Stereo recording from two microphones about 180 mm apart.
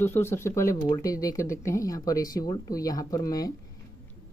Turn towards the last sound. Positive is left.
turn(degrees=20)  # may be behind; listen again after turning